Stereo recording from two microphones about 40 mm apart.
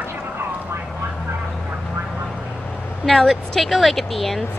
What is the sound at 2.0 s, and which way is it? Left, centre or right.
Vehicle, centre.